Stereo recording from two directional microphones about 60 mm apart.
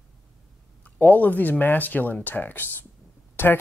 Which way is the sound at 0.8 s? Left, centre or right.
Left.